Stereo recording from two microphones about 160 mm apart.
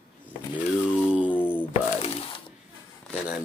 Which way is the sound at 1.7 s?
40° left (ahead or behind).